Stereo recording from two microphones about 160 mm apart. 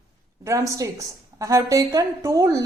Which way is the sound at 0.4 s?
20° right (ahead or behind).